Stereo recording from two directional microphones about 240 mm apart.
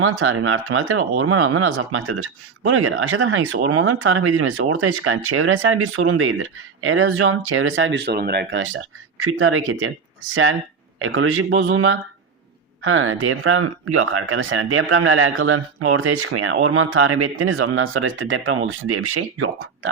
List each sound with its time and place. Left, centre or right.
0.0 s speech: right